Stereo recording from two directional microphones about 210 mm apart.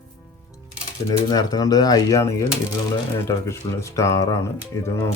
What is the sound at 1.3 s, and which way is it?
Speech, 20° left (ahead or behind).